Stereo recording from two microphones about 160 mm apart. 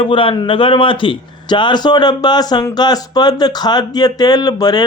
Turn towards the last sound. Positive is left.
turn(degrees=25)  # may be behind; listen again after turning